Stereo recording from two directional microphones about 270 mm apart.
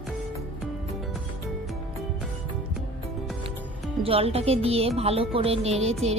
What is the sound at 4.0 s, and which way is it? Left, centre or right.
Speech, right.